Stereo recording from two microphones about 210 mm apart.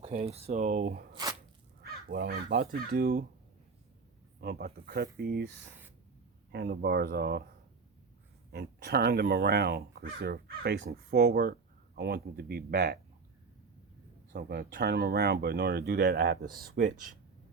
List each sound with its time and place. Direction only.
0.0 s speech: 30° right (ahead or behind)
1.1 s a sound: 20° right (ahead or behind)
1.8 s crow: 45° right (ahead or behind)
2.6 s speech: 45° right (ahead or behind)
4.4 s speech: 50° right (ahead or behind)
6.5 s speech: 50° right (ahead or behind)
8.5 s speech: 50° right (ahead or behind)
14.3 s speech: 50° right (ahead or behind)